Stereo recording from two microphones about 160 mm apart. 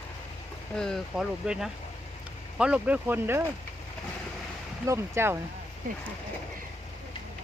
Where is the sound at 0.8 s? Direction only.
Centre (ahead or behind).